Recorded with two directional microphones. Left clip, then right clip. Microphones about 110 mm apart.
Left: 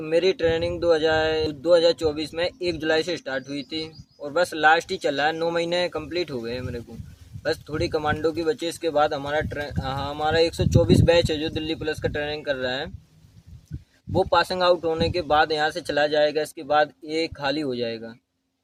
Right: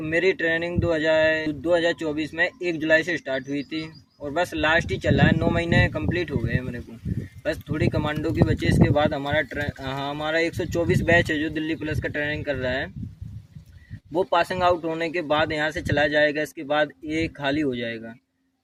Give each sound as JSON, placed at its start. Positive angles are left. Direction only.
{"t": 0.0, "sound": "speech", "side_deg": 40}
{"t": 14.2, "sound": "speech", "side_deg": 35}